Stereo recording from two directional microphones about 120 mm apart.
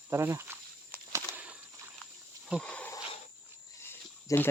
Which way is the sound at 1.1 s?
20° right (ahead or behind).